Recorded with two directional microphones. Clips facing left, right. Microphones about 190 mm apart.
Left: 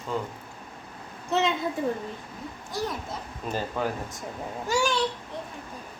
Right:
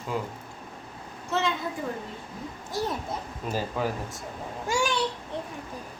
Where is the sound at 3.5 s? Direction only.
10° right (ahead or behind).